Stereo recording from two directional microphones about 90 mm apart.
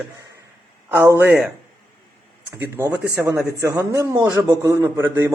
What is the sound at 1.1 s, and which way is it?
Speech, 25° right (ahead or behind).